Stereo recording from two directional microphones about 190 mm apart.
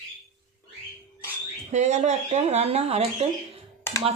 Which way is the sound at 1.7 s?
35° right (ahead or behind).